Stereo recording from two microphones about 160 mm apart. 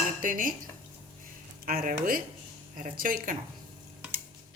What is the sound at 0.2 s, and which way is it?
Speech, 55° right (ahead or behind).